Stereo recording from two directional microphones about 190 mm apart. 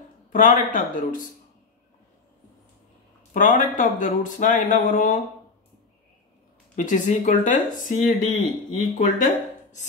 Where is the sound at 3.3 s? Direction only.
45° left (ahead or behind).